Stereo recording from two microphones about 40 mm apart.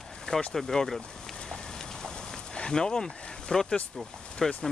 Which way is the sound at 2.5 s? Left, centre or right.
Centre.